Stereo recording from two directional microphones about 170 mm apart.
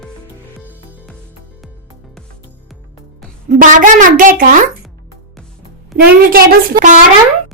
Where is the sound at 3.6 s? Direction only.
50° right (ahead or behind).